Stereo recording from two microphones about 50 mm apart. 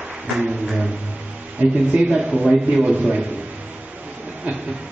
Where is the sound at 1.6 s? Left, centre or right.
Right.